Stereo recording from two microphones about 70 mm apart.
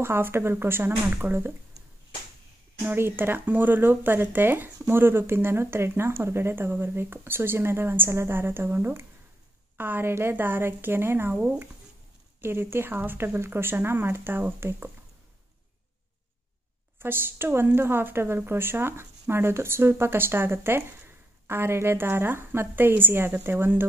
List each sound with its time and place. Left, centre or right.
0.0 s a woman's voice: right
2.8 s a woman's voice: right
17.0 s a woman's voice: right